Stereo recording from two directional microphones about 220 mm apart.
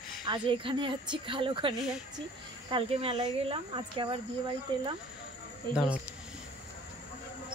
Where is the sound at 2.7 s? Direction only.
25° right (ahead or behind).